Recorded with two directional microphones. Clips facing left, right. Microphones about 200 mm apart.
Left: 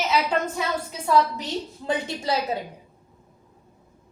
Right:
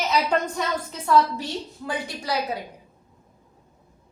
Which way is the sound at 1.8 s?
25° left (ahead or behind).